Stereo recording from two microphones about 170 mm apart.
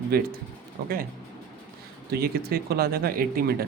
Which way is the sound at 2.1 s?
65° right (ahead or behind).